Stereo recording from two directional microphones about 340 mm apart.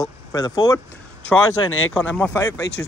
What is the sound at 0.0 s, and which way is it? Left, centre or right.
Speech, centre.